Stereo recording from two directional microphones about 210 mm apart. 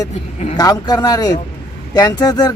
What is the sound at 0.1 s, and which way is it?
Speech, 35° left (ahead or behind).